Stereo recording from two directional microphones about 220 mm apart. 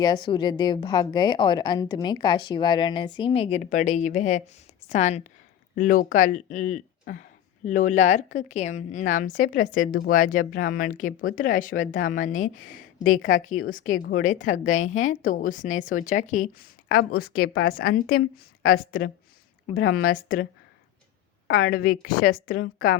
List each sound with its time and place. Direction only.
0.0 s a woman's voice: 20° left (ahead or behind); by 18.2 s 45° left (ahead or behind)
19.9 s a woman's voice: 40° left (ahead or behind)
21.4 s a woman's voice: 75° left (ahead or behind)
22.0 s a woman's voice: 40° left (ahead or behind)